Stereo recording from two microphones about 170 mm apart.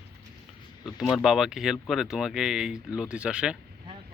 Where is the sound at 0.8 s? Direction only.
25° left (ahead or behind).